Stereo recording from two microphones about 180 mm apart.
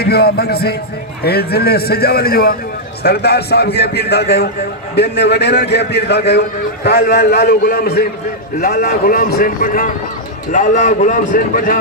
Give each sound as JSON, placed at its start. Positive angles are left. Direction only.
{"t": 0.0, "sound": "a man's voice", "side_deg": 60}